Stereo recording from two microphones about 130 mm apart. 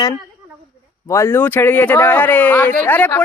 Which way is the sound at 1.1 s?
20° left (ahead or behind).